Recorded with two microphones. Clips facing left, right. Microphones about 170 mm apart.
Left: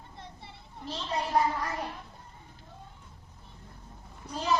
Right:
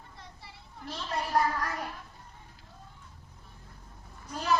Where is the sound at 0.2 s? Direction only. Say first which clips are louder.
Left 5 dB; 25° left (ahead or behind).